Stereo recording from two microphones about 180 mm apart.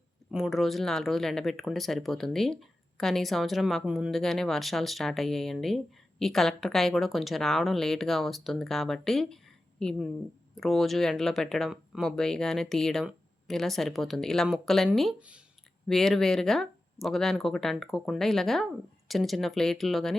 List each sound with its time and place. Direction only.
0.3 s speech: centre (ahead or behind)